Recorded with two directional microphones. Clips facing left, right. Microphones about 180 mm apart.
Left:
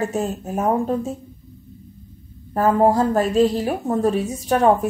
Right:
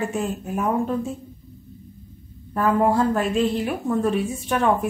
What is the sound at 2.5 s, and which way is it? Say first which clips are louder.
A woman's voice: left 3 dB; 40° left (ahead or behind).